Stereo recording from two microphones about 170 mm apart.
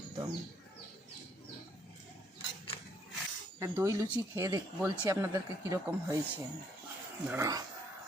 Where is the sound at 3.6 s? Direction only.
15° right (ahead or behind).